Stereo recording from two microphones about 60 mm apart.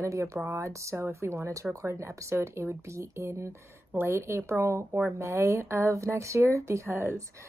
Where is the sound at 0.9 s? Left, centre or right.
Right.